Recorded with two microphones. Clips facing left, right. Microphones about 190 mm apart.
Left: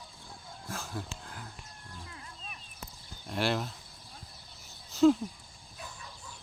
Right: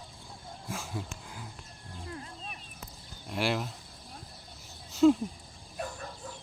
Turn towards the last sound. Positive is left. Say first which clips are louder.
# right 9 dB
turn(degrees=-55)  # may be behind; listen again after turning